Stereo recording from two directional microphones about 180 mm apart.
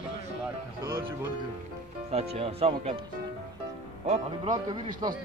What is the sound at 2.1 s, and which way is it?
Speech, 35° right (ahead or behind).